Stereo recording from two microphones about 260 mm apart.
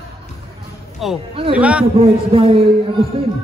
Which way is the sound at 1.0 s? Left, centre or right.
Centre.